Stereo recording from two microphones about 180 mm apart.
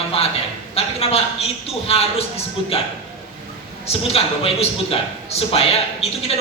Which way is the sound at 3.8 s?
35° left (ahead or behind).